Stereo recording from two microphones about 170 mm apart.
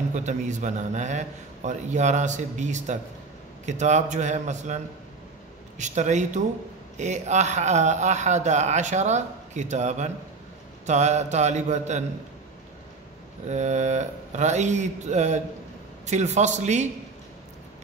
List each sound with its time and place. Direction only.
0.1 s a man's voice: 45° right (ahead or behind)
5.8 s a man's voice: 45° right (ahead or behind)
13.5 s a man's voice: 45° right (ahead or behind)